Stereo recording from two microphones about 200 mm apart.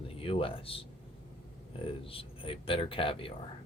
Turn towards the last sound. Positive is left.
turn(degrees=25)  # may be behind; listen again after turning